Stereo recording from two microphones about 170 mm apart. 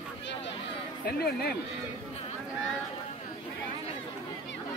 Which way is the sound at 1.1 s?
65° left (ahead or behind).